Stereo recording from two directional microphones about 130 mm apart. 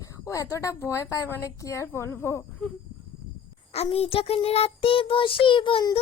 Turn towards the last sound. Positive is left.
turn(degrees=35)  # may be behind; listen again after turning